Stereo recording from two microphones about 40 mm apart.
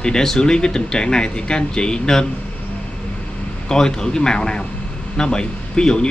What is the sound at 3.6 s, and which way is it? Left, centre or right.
Speech, centre.